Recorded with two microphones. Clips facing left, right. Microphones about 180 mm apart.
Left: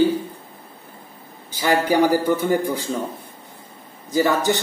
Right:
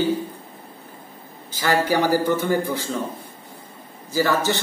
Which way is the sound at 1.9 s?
15° left (ahead or behind).